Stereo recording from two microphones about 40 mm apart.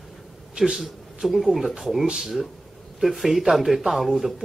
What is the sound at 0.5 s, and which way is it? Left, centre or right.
Speech, centre.